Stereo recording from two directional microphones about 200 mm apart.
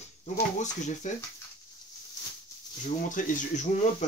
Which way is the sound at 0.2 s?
35° left (ahead or behind).